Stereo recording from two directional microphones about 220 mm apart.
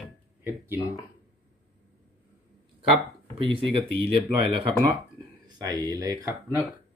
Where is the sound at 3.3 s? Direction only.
25° right (ahead or behind).